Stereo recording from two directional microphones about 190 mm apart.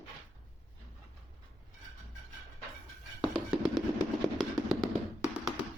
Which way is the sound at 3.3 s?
Centre (ahead or behind).